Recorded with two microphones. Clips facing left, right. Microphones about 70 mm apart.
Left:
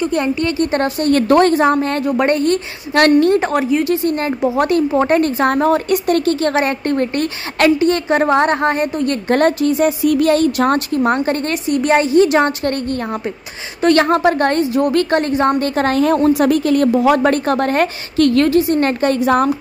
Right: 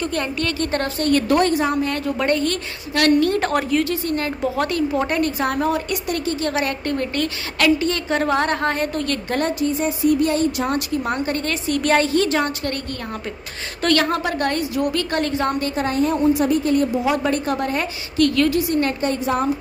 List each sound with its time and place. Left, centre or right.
0.0 s a woman's voice: centre
1.1 s a woman's voice: left
2.0 s a woman's voice: left
3.3 s a woman's voice: centre
3.8 s a woman's voice: left
6.5 s a woman's voice: left
9.3 s speech: left
11.0 s speech: left
11.7 s a woman's voice: left
13.9 s speech: left
15.7 s a woman's voice: left
18.2 s speech: left
18.9 s a woman's voice: left